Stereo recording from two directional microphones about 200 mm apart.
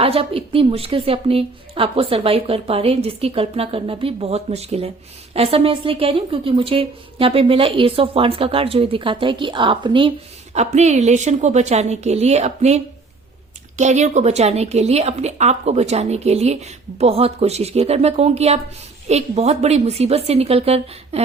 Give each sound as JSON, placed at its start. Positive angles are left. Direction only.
{"t": 0.0, "sound": "a woman's voice", "side_deg": -30}
{"t": 10.5, "sound": "a woman's voice", "side_deg": -35}